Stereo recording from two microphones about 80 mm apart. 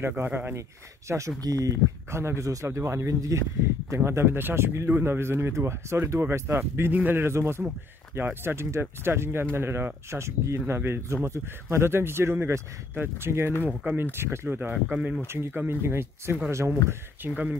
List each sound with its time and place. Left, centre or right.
0.2 s speech: right
0.6 s speech: right
13.7 s speech: centre
14.1 s speech: right
17.3 s speech: centre